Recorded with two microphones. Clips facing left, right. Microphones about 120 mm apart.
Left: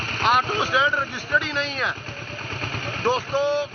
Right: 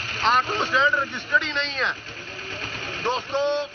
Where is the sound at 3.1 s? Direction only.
5° left (ahead or behind).